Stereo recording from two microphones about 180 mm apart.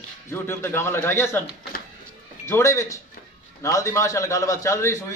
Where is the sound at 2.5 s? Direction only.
15° left (ahead or behind).